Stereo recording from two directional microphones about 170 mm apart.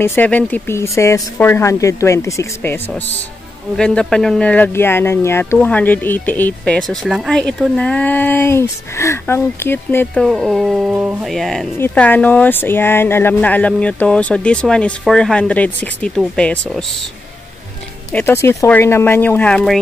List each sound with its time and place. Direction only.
0.0 s speech: 10° left (ahead or behind)
3.7 s speech: 5° left (ahead or behind)
18.1 s speech: 15° left (ahead or behind)